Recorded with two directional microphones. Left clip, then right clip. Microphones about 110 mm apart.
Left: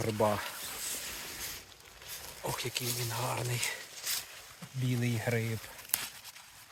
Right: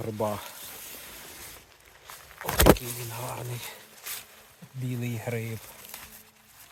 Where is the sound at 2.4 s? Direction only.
Centre (ahead or behind).